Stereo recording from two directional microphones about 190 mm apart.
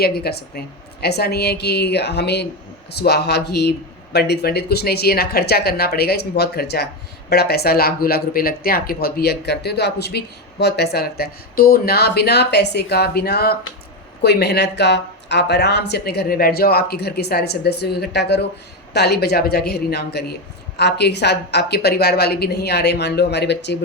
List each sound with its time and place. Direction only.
0.0 s speech: 55° left (ahead or behind)